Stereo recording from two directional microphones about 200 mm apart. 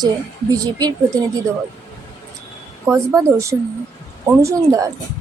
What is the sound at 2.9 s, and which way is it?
A woman's voice, 15° right (ahead or behind).